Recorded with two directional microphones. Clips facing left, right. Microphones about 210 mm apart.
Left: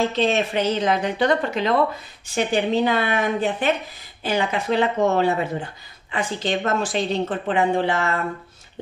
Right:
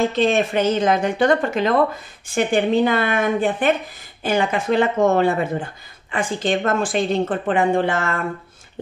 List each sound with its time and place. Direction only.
0.2 s a woman's voice: 50° right (ahead or behind)